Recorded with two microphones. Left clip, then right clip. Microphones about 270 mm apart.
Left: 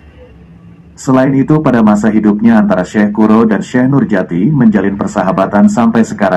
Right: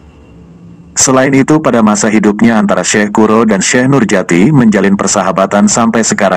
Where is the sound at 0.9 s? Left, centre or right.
Right.